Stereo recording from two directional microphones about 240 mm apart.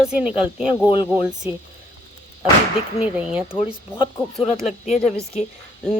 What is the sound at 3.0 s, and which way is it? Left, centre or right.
Speech, centre.